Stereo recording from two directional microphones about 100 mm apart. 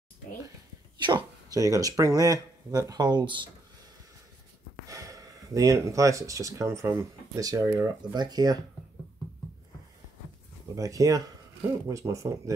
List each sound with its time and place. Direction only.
0.9 s a sound: 50° right (ahead or behind)
1.6 s speech: 35° right (ahead or behind)
4.8 s speech: 35° right (ahead or behind)
8.1 s speech: 45° right (ahead or behind)
10.7 s speech: 35° right (ahead or behind)